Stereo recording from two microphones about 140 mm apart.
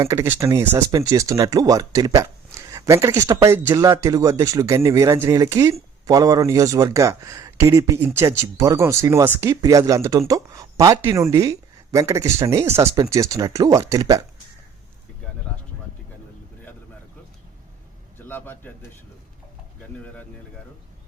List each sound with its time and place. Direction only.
0.0 s speech: 20° right (ahead or behind)
18.3 s bird: 15° left (ahead or behind)